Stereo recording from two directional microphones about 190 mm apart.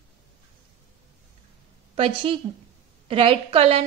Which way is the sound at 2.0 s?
30° right (ahead or behind).